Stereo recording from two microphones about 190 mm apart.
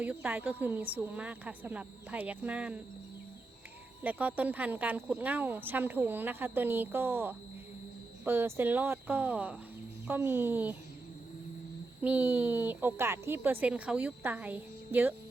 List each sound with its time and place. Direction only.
0.0 s speech: 10° right (ahead or behind)
4.0 s speech: 10° right (ahead or behind)
12.0 s speech: 10° right (ahead or behind)